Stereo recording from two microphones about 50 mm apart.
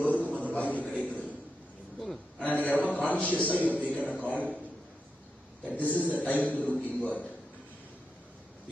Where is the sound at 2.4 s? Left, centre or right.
Left.